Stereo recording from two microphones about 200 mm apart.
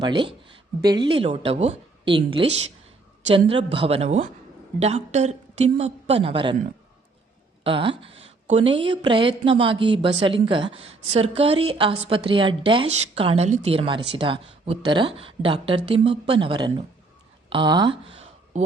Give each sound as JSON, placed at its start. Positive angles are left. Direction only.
{"t": 0.0, "sound": "a woman's voice", "side_deg": -25}
{"t": 7.6, "sound": "a woman's voice", "side_deg": -25}